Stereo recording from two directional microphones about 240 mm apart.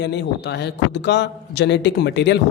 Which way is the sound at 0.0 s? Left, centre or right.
Left.